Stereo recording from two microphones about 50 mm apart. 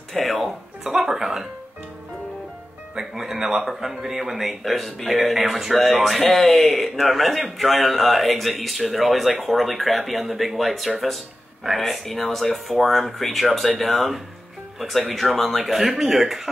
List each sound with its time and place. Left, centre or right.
0.1 s music: centre
0.8 s a sound: centre
3.0 s a man's voice: centre